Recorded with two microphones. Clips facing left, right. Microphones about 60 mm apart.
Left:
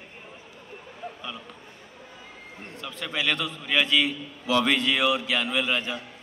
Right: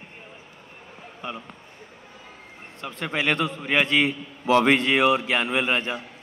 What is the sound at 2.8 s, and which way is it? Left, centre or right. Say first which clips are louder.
A man's voice: right 3 dB; right.